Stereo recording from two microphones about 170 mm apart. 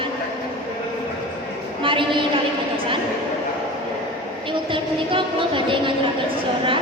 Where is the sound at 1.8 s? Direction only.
30° right (ahead or behind).